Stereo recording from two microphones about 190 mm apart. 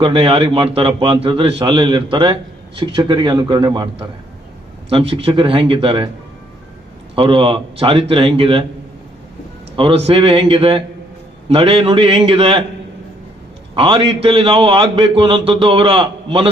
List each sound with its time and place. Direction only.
0.0 s a man's voice: 30° right (ahead or behind)
7.2 s a man's voice: 30° right (ahead or behind)
9.7 s a man's voice: 30° right (ahead or behind)
13.7 s a man's voice: 25° right (ahead or behind)